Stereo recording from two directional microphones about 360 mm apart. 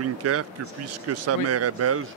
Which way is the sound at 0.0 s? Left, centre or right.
Right.